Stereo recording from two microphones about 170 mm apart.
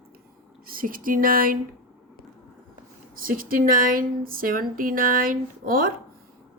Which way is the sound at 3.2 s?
55° right (ahead or behind).